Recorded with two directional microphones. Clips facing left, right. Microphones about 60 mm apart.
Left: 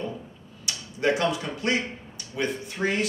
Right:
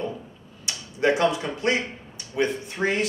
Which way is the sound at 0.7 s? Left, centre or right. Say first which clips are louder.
Right 2 dB; right.